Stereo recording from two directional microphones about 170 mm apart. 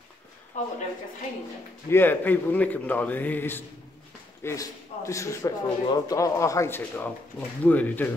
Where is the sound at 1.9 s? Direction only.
10° left (ahead or behind).